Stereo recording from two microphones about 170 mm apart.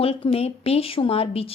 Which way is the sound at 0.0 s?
35° left (ahead or behind).